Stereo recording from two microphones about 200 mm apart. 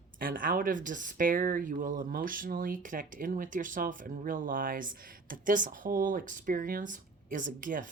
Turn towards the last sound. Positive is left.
turn(degrees=-45)  # may be behind; listen again after turning